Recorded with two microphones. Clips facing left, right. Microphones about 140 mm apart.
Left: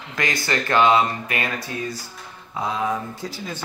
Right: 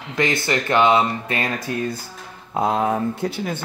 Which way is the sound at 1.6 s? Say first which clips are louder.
Right 4 dB; 55° right (ahead or behind).